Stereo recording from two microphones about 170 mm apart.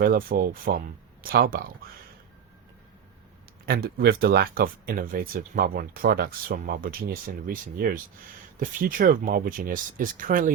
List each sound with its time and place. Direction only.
0.0 s speech: 60° right (ahead or behind)
3.7 s speech: 65° right (ahead or behind)